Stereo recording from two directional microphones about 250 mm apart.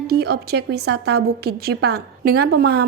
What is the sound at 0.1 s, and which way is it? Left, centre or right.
A woman's voice, right.